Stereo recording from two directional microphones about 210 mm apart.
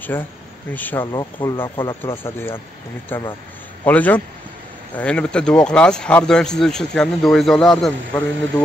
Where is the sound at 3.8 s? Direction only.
5° left (ahead or behind).